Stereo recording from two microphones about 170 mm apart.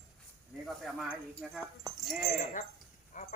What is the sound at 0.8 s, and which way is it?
Speech, 5° right (ahead or behind).